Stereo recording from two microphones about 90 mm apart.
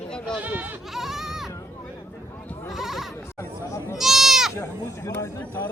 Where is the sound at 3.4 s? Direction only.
35° left (ahead or behind).